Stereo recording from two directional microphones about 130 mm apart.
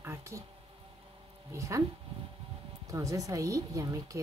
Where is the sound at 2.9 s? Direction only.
25° right (ahead or behind).